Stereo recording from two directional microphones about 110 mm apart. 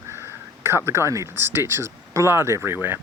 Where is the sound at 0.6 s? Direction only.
25° right (ahead or behind).